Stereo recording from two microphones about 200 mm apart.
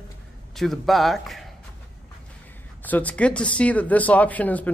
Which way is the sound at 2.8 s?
10° left (ahead or behind).